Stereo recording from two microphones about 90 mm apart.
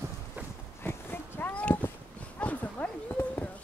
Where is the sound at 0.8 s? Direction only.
25° left (ahead or behind).